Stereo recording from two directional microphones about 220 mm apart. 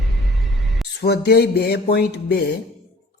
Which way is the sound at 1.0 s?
45° left (ahead or behind).